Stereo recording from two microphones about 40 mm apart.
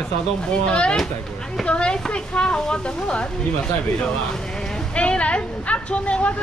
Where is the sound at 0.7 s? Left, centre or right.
Left.